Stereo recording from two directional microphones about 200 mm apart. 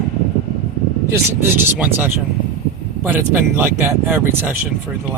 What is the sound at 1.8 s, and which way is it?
Speech, 10° right (ahead or behind).